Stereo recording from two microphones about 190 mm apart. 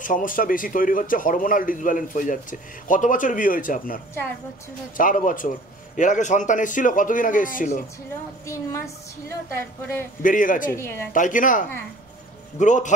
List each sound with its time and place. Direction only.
0.0 s speech: 45° left (ahead or behind)
8.5 s a woman's voice: 15° left (ahead or behind)
10.2 s speech: 45° left (ahead or behind)
10.7 s a woman's voice: 10° left (ahead or behind)
11.1 s speech: 45° left (ahead or behind)